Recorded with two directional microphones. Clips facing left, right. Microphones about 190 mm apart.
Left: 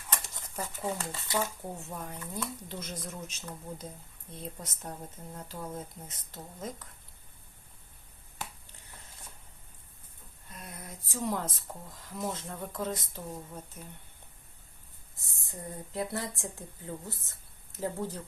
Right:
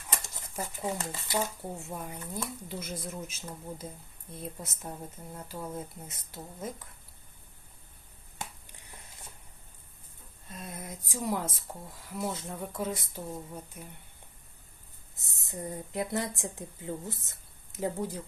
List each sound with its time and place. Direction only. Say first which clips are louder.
0.1 s speech: even; 10° right (ahead or behind)
10.6 s speech: right 4 dB; 20° right (ahead or behind)
15.4 s a woman's voice: right 4 dB; 20° right (ahead or behind)